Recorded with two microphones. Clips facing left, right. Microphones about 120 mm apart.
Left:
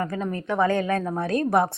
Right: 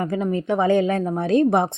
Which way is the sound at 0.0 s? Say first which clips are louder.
Right 5 dB; 20° right (ahead or behind).